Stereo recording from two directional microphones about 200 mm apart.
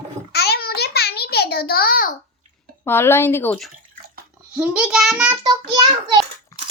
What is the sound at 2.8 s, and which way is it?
Speech, 10° left (ahead or behind).